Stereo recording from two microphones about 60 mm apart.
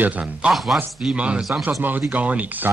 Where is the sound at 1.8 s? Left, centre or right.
Right.